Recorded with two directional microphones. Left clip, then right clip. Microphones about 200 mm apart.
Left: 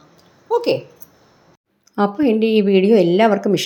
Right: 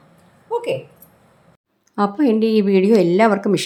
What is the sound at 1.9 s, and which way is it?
A woman's voice, centre (ahead or behind).